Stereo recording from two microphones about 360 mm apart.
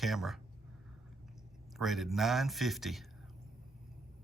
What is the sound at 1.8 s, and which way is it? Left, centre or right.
Speech, centre.